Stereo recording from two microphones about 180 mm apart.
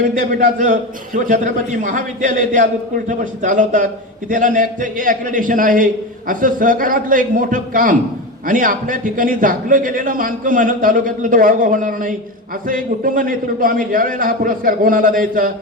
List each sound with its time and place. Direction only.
0.1 s a man's voice: 50° right (ahead or behind)